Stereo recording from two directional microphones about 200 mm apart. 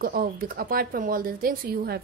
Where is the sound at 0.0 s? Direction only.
45° right (ahead or behind).